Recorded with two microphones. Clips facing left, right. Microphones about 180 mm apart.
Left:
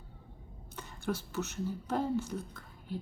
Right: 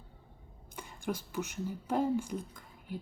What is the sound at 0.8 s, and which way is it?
A woman's voice, 10° right (ahead or behind).